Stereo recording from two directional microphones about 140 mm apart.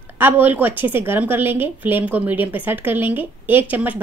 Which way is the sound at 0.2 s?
15° right (ahead or behind).